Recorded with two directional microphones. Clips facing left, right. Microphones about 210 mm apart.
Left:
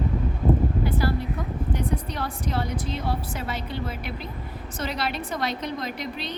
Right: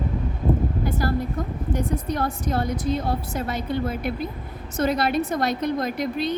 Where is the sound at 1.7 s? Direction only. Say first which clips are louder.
Right 5 dB; 45° right (ahead or behind).